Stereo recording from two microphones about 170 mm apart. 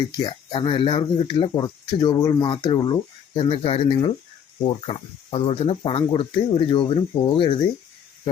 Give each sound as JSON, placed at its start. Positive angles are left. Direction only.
{"t": 0.2, "sound": "speech", "side_deg": 30}